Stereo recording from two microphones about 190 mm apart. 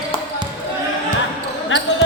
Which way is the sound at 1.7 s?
85° left.